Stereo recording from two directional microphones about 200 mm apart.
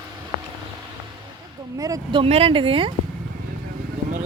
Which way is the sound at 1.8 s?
15° right (ahead or behind).